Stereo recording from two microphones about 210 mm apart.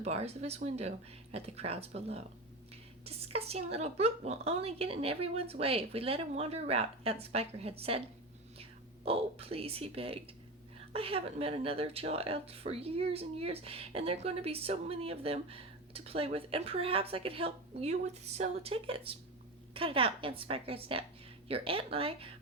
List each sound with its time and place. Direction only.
0.0 s speech: 30° right (ahead or behind)